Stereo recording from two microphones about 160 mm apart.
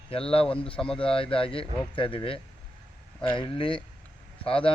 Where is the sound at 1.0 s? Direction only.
35° left (ahead or behind).